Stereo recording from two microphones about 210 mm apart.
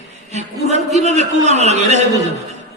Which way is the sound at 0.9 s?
35° right (ahead or behind).